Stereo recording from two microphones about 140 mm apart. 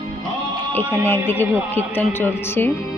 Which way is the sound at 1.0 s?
15° left (ahead or behind).